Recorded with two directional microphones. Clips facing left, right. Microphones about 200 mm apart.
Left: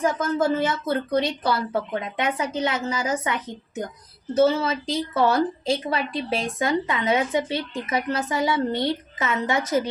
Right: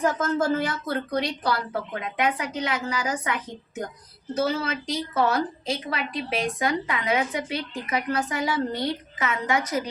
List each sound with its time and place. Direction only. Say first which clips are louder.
0.2 s speech: left 2 dB; 20° left (ahead or behind)
4.4 s speech: left 6 dB; 25° left (ahead or behind)